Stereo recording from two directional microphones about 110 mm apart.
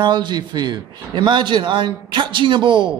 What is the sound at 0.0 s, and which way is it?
A man's voice, 40° right (ahead or behind).